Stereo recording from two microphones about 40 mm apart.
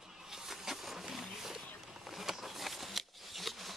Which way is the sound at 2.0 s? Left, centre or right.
Centre.